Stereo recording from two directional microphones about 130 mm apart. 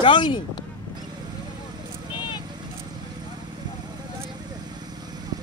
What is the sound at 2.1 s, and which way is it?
Vehicle, 35° left (ahead or behind).